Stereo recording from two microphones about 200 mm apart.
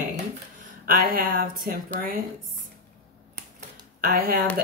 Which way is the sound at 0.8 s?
45° right (ahead or behind).